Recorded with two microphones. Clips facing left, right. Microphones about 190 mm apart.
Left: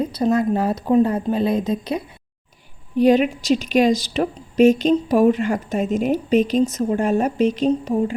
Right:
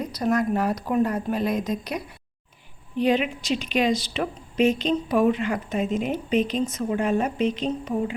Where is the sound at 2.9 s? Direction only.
40° left (ahead or behind).